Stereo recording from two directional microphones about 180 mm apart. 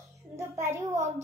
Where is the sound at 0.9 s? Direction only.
40° right (ahead or behind).